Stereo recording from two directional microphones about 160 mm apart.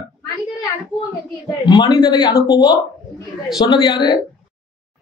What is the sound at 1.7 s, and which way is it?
A man's voice, 25° left (ahead or behind).